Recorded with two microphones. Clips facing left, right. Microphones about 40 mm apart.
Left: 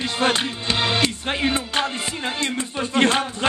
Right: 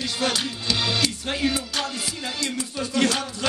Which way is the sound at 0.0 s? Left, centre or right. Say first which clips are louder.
Left 4 dB; left.